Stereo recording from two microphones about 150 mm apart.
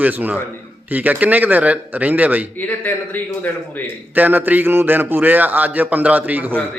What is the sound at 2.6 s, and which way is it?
Speech, 10° left (ahead or behind).